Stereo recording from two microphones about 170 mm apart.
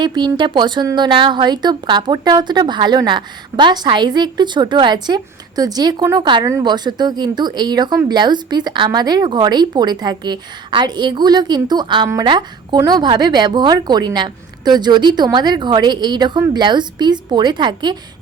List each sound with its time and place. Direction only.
0.0 s speech: 25° right (ahead or behind)